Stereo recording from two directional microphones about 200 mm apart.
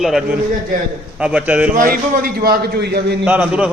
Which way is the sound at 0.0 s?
Centre (ahead or behind).